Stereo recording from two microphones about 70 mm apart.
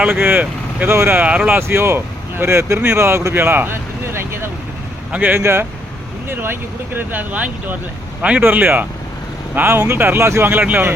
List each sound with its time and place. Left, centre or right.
0.0 s speech: right
3.3 s a sound: right
5.1 s speech: right
5.4 s speech: right